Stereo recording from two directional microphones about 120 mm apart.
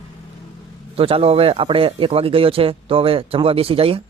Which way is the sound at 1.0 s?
55° right (ahead or behind).